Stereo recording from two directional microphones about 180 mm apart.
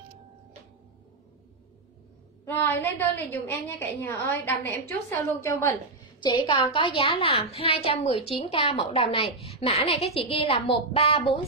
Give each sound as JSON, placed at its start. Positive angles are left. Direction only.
{"t": 2.4, "sound": "a woman's voice", "side_deg": 10}
{"t": 6.2, "sound": "a woman's voice", "side_deg": 25}